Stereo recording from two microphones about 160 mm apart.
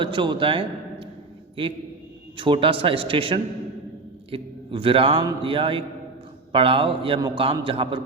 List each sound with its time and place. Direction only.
0.0 s a man's voice: 30° right (ahead or behind)
2.4 s a man's voice: 30° right (ahead or behind)